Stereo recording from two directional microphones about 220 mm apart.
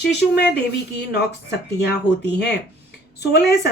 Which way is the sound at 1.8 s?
50° left (ahead or behind).